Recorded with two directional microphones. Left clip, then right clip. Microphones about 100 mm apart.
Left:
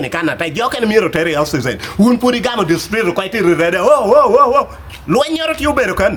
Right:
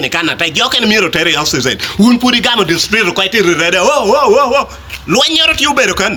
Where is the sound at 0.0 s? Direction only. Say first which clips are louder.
Right 4 dB; 45° left (ahead or behind); by 2.7 s 25° left (ahead or behind).